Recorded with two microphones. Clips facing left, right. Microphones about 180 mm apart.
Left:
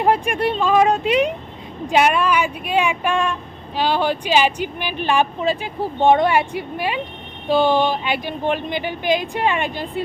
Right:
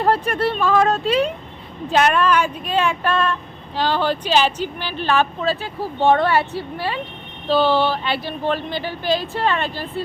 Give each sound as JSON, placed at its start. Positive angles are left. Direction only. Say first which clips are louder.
{"t": 0.0, "sound": "speech", "louder": "left 1 dB", "side_deg": 15}